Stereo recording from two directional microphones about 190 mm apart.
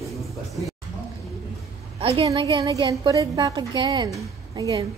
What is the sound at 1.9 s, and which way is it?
A woman's voice, 30° right (ahead or behind).